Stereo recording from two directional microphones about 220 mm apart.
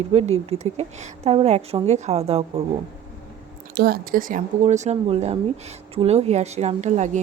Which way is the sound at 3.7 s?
45° right (ahead or behind).